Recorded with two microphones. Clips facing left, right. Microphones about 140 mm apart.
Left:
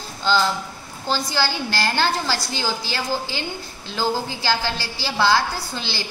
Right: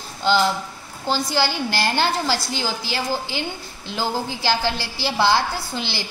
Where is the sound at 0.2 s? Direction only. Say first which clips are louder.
Right 2 dB; 20° right (ahead or behind).